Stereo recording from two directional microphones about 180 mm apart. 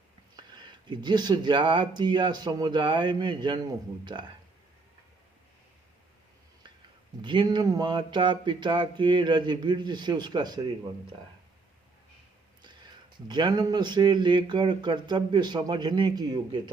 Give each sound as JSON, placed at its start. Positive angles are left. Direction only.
{"t": 0.5, "sound": "speech", "side_deg": -25}
{"t": 7.2, "sound": "speech", "side_deg": -25}
{"t": 13.2, "sound": "speech", "side_deg": -25}